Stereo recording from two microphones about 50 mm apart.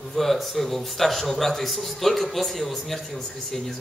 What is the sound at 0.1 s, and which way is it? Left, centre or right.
A man's voice, centre.